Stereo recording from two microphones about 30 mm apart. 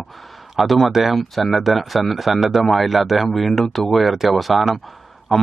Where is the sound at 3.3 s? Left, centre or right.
Centre.